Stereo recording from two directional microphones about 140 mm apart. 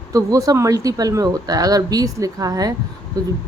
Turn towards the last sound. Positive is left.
turn(degrees=-25)  # may be behind; listen again after turning